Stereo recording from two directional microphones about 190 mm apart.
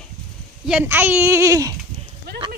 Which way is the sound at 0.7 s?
10° right (ahead or behind).